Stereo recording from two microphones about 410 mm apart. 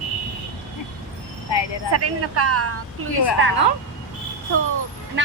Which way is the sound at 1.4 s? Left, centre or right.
Left.